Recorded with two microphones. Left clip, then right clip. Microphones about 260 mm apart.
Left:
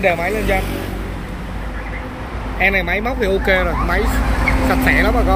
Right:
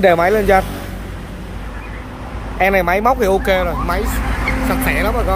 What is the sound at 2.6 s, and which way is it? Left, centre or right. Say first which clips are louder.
Speech: right 3 dB; centre.